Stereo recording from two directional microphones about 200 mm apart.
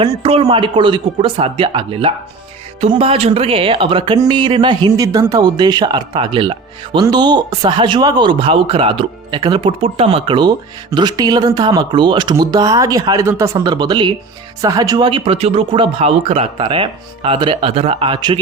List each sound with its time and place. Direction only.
0.0 s speech: 25° right (ahead or behind)